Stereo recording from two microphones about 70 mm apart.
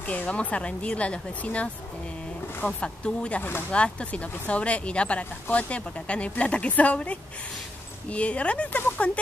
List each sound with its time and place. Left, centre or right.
0.0 s speech: left